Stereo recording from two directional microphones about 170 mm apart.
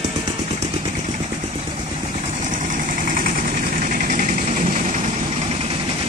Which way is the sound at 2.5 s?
50° right (ahead or behind).